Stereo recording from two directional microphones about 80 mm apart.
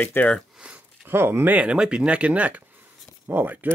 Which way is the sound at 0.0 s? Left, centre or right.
Left.